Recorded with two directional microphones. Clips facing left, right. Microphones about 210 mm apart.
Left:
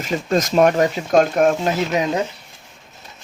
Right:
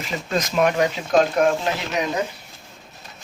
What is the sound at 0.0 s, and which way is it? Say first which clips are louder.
Speech: left 5 dB; 45° left (ahead or behind).